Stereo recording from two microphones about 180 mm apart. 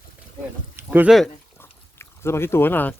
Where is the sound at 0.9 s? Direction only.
5° right (ahead or behind).